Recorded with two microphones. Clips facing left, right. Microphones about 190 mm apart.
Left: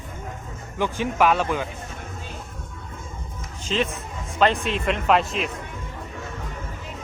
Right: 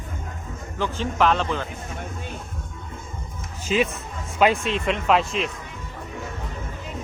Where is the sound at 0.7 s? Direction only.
15° left (ahead or behind).